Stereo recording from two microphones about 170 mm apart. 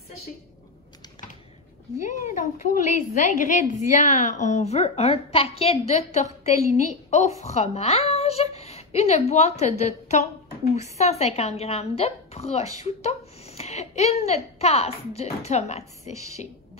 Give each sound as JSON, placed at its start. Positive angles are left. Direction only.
{"t": 2.0, "sound": "a woman's voice", "side_deg": 50}